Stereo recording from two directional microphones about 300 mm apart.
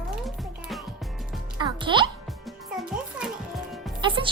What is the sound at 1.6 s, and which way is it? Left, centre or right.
Music, centre.